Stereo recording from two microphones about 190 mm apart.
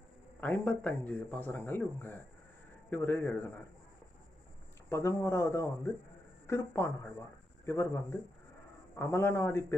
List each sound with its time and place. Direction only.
0.4 s speech: 10° left (ahead or behind)
4.8 s speech: 15° left (ahead or behind)